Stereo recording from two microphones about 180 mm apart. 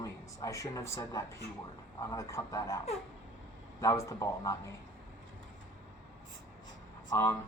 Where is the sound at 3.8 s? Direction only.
15° left (ahead or behind).